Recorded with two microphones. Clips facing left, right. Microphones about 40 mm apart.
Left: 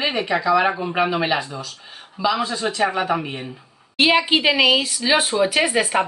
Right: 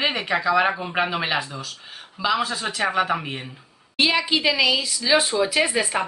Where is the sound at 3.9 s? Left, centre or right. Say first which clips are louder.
Left 4 dB; left.